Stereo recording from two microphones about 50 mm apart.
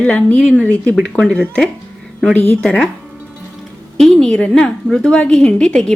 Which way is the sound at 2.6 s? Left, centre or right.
Centre.